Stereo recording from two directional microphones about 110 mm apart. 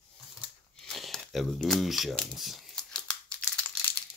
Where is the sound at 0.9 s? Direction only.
Centre (ahead or behind).